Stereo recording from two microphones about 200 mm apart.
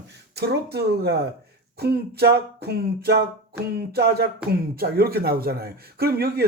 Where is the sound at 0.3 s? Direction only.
55° right (ahead or behind).